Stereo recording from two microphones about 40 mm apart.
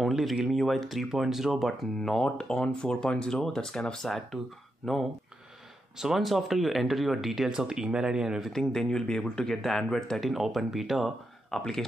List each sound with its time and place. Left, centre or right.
0.5 s speech: centre
2.0 s speech: centre
4.0 s speech: centre
5.9 s speech: centre
8.5 s speech: centre
10.1 s speech: centre